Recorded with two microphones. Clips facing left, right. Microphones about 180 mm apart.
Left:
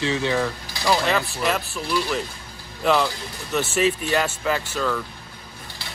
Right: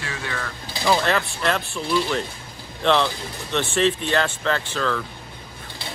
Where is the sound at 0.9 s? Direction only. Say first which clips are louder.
Even; centre (ahead or behind).